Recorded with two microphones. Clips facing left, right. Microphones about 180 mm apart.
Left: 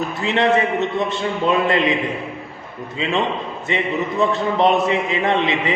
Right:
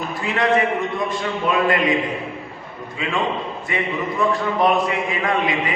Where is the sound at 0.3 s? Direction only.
25° left (ahead or behind).